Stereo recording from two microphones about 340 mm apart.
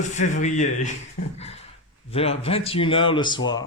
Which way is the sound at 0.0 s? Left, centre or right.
Left.